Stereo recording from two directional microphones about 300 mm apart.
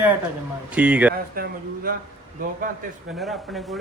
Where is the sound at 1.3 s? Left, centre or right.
Right.